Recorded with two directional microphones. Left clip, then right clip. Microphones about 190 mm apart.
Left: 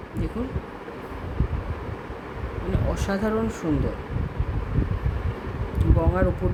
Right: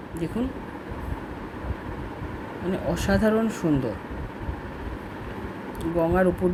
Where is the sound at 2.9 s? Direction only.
15° right (ahead or behind).